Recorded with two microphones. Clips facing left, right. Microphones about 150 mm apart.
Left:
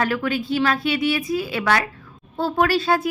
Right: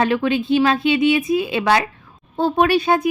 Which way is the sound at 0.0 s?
20° right (ahead or behind).